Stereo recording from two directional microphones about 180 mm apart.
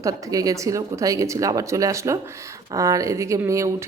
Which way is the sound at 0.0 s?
20° right (ahead or behind).